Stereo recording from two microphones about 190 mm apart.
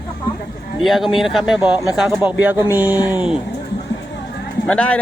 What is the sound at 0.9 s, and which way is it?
Speech, centre (ahead or behind).